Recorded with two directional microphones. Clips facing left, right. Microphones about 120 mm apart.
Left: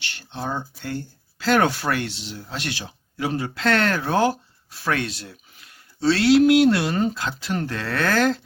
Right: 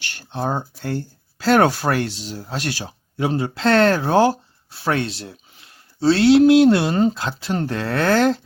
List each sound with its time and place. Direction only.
0.0 s speech: 40° right (ahead or behind)
3.2 s speech: 30° right (ahead or behind)